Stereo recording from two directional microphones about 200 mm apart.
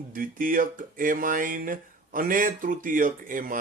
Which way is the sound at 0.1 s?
45° right (ahead or behind).